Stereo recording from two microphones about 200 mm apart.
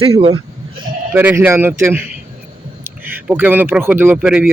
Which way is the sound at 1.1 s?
10° right (ahead or behind).